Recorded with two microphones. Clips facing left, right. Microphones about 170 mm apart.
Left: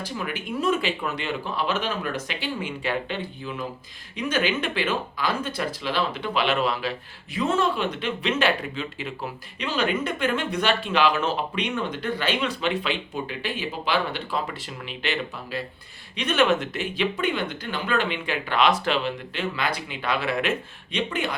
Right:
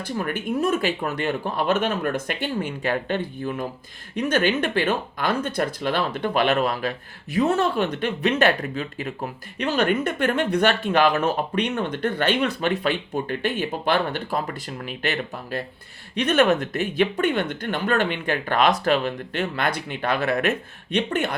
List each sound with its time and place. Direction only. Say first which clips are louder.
0.3 s speech: right 2 dB; 45° right (ahead or behind)
9.6 s speech: right 4 dB; 55° right (ahead or behind)
20.9 s speech: right 4 dB; 55° right (ahead or behind)